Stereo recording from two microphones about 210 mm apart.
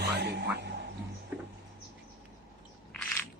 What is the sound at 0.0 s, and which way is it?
Music, 50° right (ahead or behind).